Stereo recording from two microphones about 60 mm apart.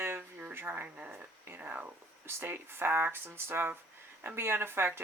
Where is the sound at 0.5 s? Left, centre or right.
Right.